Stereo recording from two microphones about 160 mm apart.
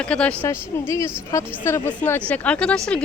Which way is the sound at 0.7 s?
15° left (ahead or behind).